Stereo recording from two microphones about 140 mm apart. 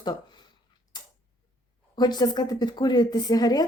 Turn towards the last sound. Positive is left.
turn(degrees=30)  # may be behind; listen again after turning